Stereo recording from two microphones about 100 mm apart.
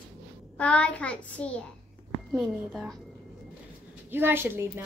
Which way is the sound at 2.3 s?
Centre (ahead or behind).